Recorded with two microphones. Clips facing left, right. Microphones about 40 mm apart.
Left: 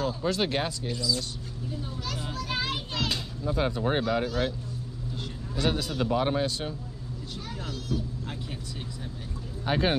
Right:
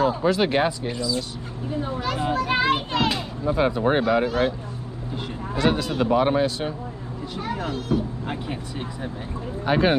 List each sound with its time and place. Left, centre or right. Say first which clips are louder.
0.0 s a sound: right 8 dB; right
0.3 s speech: right 7 dB; centre
0.6 s speech: right 8 dB; right
1.7 s children playing: right 10 dB; right
3.1 s speech: right 7 dB; right
5.9 s speech: right 6 dB; right
7.3 s speech: right 11 dB; right
9.7 s speech: right 6 dB; centre